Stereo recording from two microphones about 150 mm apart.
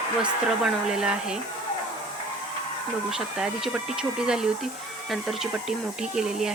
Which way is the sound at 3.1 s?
5° right (ahead or behind).